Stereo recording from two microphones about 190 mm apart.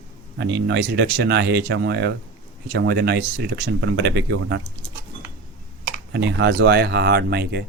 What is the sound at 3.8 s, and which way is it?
Speech, 70° right (ahead or behind).